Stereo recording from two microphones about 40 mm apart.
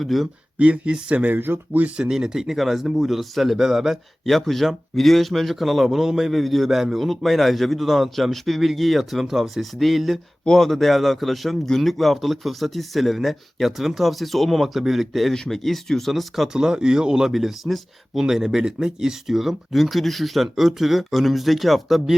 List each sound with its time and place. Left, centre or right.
0.0 s speech: centre
0.6 s speech: right
1.1 s speech: right
1.4 s speech: right
2.0 s speech: centre
6.3 s speech: centre
16.5 s speech: centre
17.2 s speech: centre